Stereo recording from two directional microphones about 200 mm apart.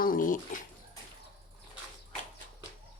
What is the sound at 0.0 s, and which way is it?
Speech, 45° left (ahead or behind).